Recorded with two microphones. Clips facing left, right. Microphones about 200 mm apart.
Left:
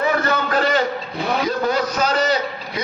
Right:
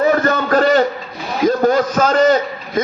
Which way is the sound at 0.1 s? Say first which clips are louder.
Right 5 dB; 45° right (ahead or behind).